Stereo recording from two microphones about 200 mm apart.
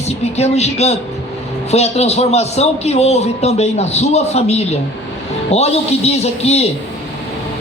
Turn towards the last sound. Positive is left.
turn(degrees=30)  # may be behind; listen again after turning